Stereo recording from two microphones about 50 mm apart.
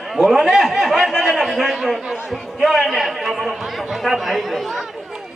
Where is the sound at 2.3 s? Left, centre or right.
Centre.